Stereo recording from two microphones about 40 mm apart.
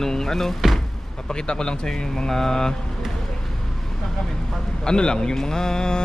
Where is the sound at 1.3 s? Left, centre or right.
Left.